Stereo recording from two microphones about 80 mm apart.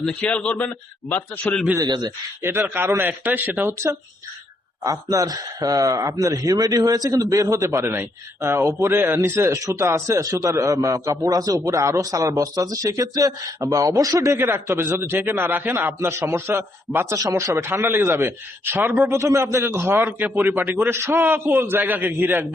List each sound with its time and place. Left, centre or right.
0.0 s speech: centre
1.8 s a man's voice: right
2.4 s a man's voice: right
4.8 s a man's voice: right
17.2 s a man's voice: right
17.7 s a man's voice: right